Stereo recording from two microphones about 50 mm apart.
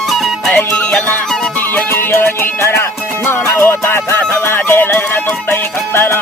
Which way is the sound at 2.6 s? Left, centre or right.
Left.